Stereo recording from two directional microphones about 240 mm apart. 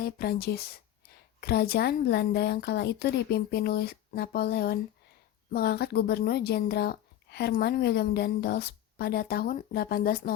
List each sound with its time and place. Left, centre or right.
0.0 s speech: left